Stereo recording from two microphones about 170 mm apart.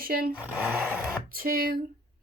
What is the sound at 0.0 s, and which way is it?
Speech, 60° right (ahead or behind).